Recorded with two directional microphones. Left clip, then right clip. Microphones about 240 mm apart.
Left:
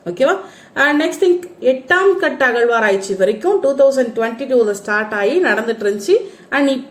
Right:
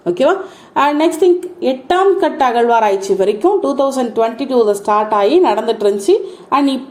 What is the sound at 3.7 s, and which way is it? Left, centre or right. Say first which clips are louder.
Speech: left 3 dB; right.